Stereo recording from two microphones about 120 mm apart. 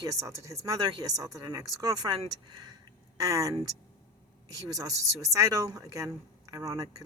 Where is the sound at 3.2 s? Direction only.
30° right (ahead or behind).